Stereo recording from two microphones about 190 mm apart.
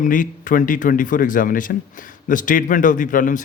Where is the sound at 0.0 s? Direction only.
45° left (ahead or behind).